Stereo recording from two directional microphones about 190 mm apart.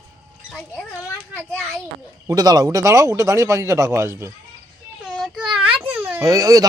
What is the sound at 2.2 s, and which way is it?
Speech, 20° right (ahead or behind).